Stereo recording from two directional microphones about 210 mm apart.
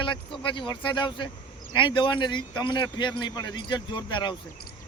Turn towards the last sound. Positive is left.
turn(degrees=20)  # may be behind; listen again after turning